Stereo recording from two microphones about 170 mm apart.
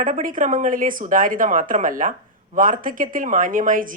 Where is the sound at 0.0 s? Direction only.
50° right (ahead or behind).